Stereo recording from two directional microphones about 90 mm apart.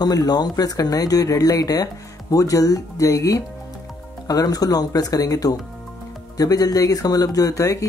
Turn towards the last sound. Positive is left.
turn(degrees=40)  # may be behind; listen again after turning